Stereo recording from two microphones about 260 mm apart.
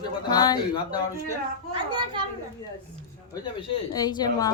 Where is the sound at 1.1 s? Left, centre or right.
Centre.